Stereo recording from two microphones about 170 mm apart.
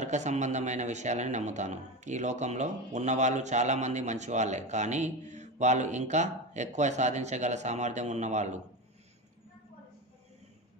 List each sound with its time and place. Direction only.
0.0 s speech: 45° right (ahead or behind)